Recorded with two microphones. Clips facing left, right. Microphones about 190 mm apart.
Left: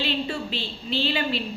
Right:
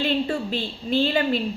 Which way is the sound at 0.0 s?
50° right (ahead or behind).